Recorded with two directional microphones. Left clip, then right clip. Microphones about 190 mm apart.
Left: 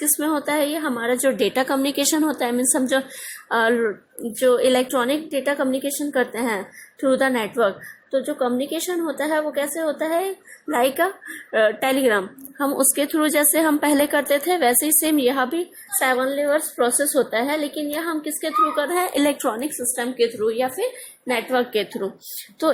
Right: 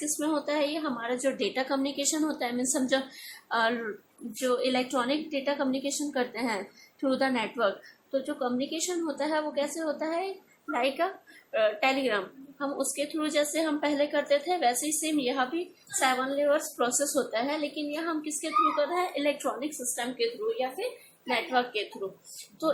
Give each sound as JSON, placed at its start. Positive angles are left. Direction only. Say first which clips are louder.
{"t": 0.0, "sound": "a woman's voice", "louder": "left 7 dB", "side_deg": 40}